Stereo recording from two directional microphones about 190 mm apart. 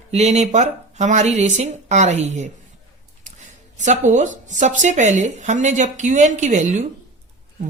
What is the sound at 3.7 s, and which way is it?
Speech, 40° right (ahead or behind).